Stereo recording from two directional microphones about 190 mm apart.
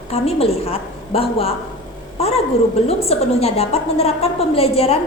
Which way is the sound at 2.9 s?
30° left (ahead or behind).